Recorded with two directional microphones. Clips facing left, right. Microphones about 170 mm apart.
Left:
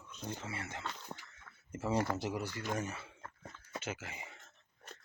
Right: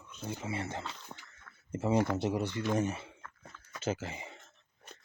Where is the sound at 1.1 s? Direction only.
10° left (ahead or behind).